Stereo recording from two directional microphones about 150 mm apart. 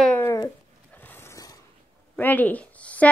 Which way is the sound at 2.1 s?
10° left (ahead or behind).